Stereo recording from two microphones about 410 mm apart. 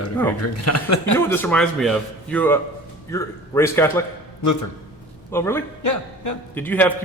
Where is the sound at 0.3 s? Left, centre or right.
Left.